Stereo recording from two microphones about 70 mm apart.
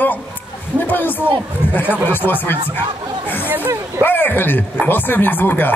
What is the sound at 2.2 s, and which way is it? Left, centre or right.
Speech, right.